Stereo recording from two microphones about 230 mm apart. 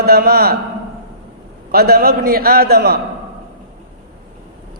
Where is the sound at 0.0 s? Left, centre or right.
Right.